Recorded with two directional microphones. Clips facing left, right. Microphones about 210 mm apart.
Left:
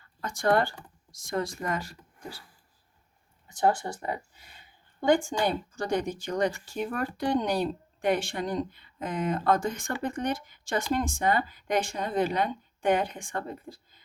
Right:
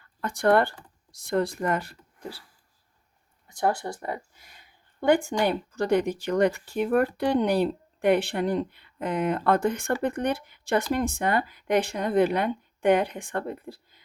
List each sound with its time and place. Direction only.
0.2 s speech: 60° right (ahead or behind)
5.0 s speech: 60° right (ahead or behind)